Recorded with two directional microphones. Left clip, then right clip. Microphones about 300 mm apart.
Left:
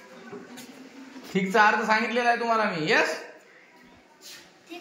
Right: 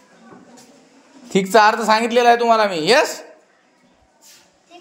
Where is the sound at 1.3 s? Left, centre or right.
Centre.